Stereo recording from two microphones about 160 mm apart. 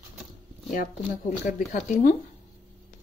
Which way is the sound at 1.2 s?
55° left (ahead or behind).